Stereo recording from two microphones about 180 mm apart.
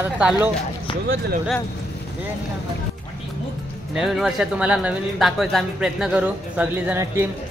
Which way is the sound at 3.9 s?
Centre (ahead or behind).